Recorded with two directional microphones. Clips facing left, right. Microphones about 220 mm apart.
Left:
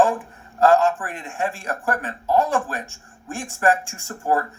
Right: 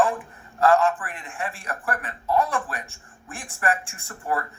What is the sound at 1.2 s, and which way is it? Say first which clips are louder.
A woman's voice: left 9 dB; 30° left (ahead or behind).